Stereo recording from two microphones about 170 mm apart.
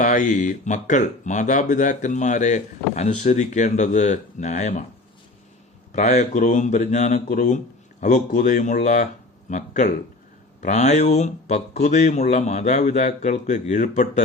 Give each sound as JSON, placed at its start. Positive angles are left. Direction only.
{"t": 0.0, "sound": "speech", "side_deg": 50}
{"t": 5.9, "sound": "speech", "side_deg": 40}